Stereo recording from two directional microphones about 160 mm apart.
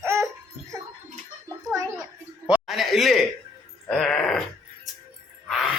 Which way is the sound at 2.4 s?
5° right (ahead or behind).